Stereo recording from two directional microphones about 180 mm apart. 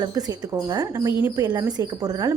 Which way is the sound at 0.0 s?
20° right (ahead or behind).